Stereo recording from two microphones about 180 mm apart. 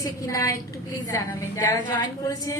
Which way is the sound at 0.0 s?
20° left (ahead or behind).